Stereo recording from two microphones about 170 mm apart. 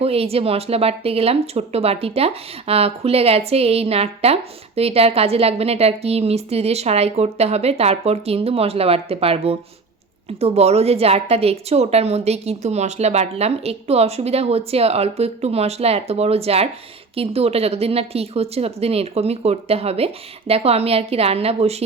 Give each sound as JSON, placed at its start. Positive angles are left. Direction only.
{"t": 0.0, "sound": "speech", "side_deg": -35}